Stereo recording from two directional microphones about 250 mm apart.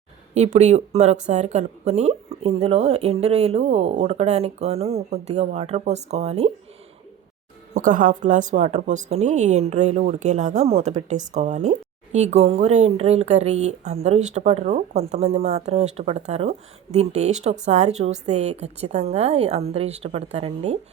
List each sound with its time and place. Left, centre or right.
0.3 s speech: right
7.7 s speech: right